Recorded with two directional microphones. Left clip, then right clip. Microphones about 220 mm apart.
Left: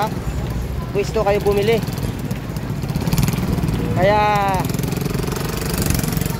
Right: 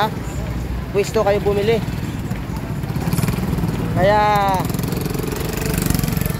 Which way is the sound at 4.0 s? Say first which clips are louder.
Right 1 dB; 5° right (ahead or behind).